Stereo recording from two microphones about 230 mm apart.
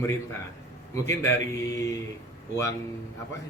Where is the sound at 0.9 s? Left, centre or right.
Centre.